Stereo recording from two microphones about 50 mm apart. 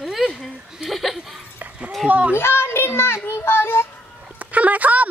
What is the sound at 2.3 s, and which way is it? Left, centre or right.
A child's voice, left.